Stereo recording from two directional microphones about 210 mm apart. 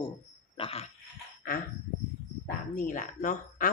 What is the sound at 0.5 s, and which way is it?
Speech, 25° left (ahead or behind).